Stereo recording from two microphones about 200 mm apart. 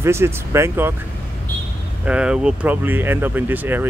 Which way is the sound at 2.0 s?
5° right (ahead or behind).